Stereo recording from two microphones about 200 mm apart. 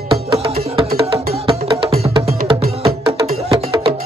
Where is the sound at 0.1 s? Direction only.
30° right (ahead or behind).